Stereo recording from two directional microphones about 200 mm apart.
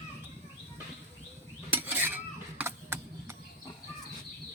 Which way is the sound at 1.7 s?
10° right (ahead or behind).